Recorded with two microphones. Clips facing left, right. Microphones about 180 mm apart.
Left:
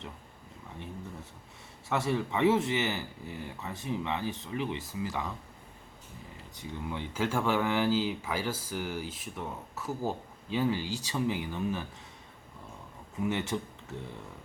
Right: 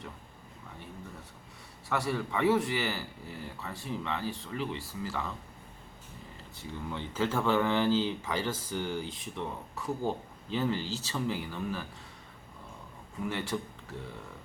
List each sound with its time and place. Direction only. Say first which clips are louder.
1.9 s speech: left 2 dB; 25° left (ahead or behind)
6.6 s speech: left 1 dB; 10° left (ahead or behind)
13.2 s speech: left 2 dB; 20° left (ahead or behind)